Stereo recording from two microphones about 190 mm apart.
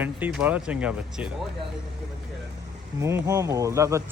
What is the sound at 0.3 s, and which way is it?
Speech, 5° right (ahead or behind).